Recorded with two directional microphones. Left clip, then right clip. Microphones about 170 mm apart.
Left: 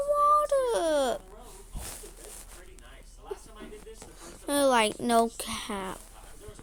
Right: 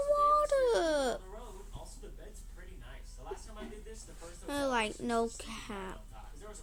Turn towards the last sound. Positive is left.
turn(degrees=20)  # may be behind; listen again after turning